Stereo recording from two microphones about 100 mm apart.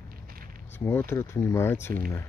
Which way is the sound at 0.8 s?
25° left (ahead or behind).